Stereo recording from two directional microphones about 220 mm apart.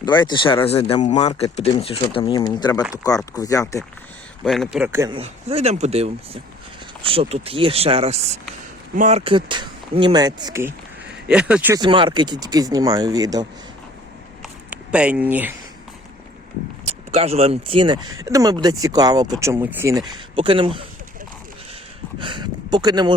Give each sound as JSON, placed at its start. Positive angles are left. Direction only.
{"t": 0.0, "sound": "speech", "side_deg": 20}
{"t": 4.4, "sound": "speech", "side_deg": 0}
{"t": 5.1, "sound": "speech", "side_deg": -25}
{"t": 11.8, "sound": "speech", "side_deg": -20}
{"t": 14.7, "sound": "speech", "side_deg": -5}
{"t": 17.1, "sound": "speech", "side_deg": -25}
{"t": 22.2, "sound": "speech", "side_deg": -20}